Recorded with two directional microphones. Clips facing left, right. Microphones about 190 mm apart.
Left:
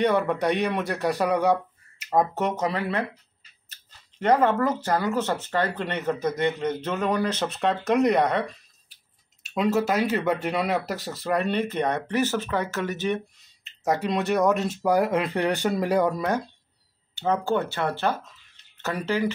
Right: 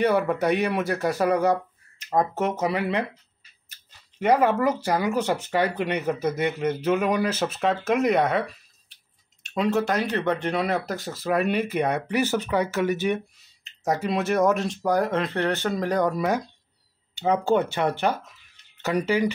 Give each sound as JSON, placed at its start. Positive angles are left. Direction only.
{"t": 0.0, "sound": "speech", "side_deg": -5}
{"t": 16.2, "sound": "speech", "side_deg": -5}